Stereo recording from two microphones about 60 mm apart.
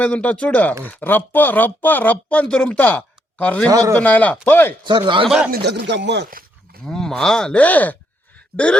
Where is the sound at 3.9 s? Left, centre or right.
Left.